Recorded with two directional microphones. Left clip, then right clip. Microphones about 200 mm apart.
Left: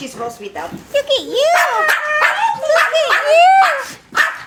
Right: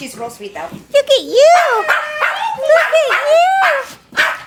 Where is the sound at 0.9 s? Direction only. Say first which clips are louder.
Right 5 dB; 50° right (ahead or behind).